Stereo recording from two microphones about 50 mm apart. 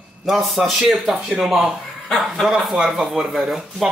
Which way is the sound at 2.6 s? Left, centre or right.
Centre.